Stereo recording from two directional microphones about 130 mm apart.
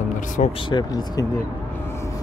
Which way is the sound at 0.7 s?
30° left (ahead or behind).